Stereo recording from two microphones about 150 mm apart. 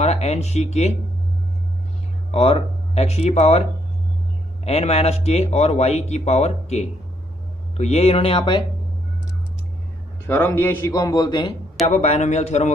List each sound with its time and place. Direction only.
0.0 s speech: 45° left (ahead or behind)
2.3 s speech: 45° left (ahead or behind)
4.6 s speech: 45° left (ahead or behind)
10.2 s a man's voice: 15° left (ahead or behind)
11.9 s speech: 50° left (ahead or behind)